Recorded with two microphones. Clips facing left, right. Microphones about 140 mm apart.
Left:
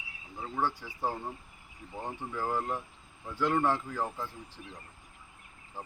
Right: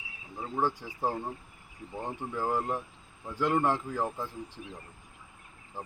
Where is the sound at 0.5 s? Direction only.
15° right (ahead or behind).